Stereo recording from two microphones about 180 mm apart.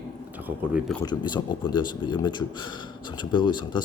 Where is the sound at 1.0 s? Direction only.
25° left (ahead or behind).